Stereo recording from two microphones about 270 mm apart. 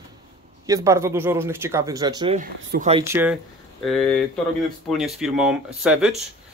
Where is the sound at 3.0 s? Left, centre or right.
Centre.